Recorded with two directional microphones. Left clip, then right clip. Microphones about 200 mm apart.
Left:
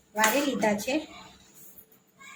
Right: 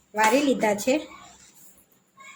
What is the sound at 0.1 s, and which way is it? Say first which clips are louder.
Speech: right 4 dB; 55° right (ahead or behind).